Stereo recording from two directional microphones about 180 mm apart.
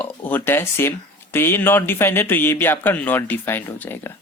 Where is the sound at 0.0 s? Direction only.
10° left (ahead or behind).